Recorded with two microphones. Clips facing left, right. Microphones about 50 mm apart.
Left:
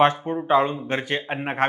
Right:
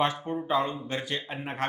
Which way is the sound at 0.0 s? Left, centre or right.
Left.